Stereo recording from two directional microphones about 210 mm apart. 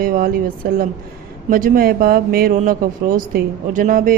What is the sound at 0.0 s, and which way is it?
A woman's voice, 40° right (ahead or behind).